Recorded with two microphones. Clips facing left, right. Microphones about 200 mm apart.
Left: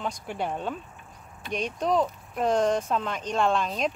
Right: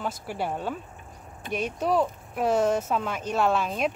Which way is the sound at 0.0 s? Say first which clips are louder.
Even; 5° right (ahead or behind).